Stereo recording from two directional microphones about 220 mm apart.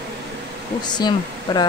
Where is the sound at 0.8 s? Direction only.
20° left (ahead or behind).